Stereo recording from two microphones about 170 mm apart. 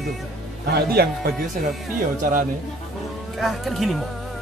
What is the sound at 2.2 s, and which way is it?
Speech, 55° right (ahead or behind).